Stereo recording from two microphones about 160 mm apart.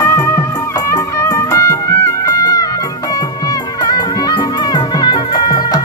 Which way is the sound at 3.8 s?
25° left (ahead or behind).